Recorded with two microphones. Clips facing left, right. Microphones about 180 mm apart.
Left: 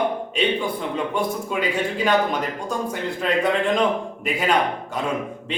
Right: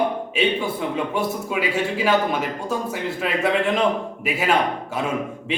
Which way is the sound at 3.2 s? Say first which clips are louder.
Left 1 dB; 5° right (ahead or behind).